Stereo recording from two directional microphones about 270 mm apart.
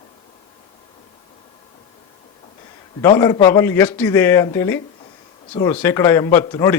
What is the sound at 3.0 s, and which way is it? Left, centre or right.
A man's voice, centre.